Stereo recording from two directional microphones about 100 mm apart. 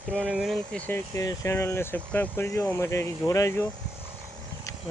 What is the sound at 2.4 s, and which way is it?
Speech, 25° left (ahead or behind).